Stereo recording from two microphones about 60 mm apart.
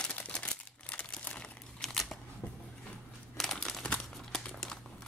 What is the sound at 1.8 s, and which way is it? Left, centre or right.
Scissors, centre.